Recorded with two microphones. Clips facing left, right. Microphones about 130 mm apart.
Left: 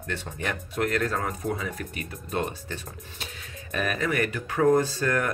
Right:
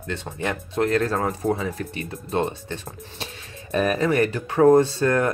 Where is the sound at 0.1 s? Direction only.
20° right (ahead or behind).